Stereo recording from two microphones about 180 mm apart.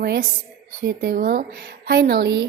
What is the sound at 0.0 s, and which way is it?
A woman's voice, 60° right (ahead or behind).